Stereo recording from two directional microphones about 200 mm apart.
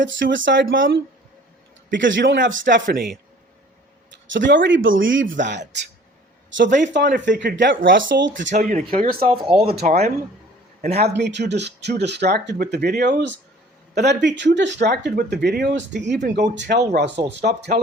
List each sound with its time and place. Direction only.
0.0 s speech: 65° right (ahead or behind)
2.8 s speech: 45° right (ahead or behind)
4.3 s speech: 65° right (ahead or behind)
6.7 s speech: 40° right (ahead or behind)
7.3 s speech: 65° right (ahead or behind)
8.5 s speech: 30° right (ahead or behind)
9.6 s speech: 50° right (ahead or behind)
11.2 s speech: 60° right (ahead or behind)